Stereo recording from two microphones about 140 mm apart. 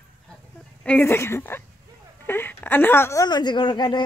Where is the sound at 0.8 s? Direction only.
15° left (ahead or behind).